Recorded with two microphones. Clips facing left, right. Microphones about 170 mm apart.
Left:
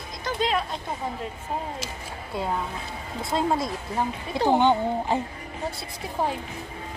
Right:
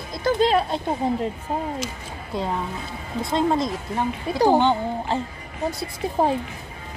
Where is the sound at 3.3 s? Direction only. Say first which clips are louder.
Right 3 dB; 5° left (ahead or behind).